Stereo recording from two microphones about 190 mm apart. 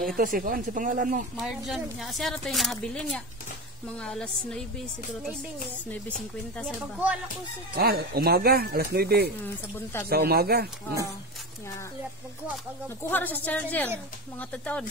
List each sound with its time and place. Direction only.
0.2 s speech: 45° right (ahead or behind)
1.3 s speech: centre (ahead or behind)
7.7 s speech: 55° right (ahead or behind)
9.4 s speech: 10° left (ahead or behind)
10.0 s speech: 55° right (ahead or behind)
13.1 s speech: 10° left (ahead or behind)